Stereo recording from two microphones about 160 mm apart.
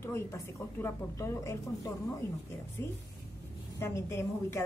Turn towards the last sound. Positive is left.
turn(degrees=15)  # may be behind; listen again after turning